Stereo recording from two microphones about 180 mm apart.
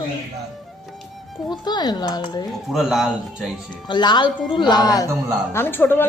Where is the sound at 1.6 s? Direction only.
25° left (ahead or behind).